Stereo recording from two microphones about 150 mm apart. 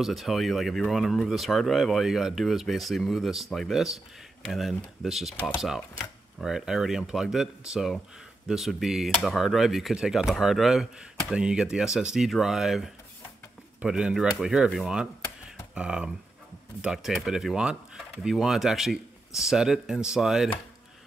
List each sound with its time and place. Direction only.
0.0 s speech: centre (ahead or behind)